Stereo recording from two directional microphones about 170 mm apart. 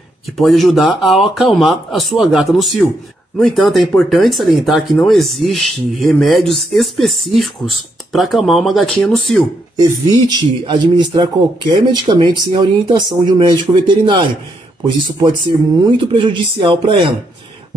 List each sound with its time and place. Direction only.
0.4 s speech: centre (ahead or behind)
9.8 s speech: 25° right (ahead or behind)